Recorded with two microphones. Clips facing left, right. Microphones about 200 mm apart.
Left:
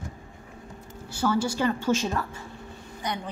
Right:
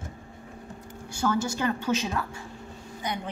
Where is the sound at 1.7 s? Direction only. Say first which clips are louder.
Left 2 dB; 5° right (ahead or behind).